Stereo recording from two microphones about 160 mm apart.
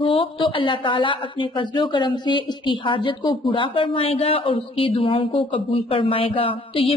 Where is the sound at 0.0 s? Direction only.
35° left (ahead or behind).